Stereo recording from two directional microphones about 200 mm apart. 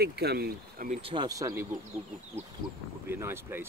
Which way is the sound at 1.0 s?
20° right (ahead or behind).